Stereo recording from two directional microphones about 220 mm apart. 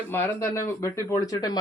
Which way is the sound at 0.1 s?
10° left (ahead or behind).